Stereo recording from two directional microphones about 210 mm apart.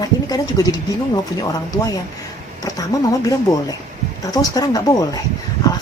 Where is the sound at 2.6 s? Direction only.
15° left (ahead or behind).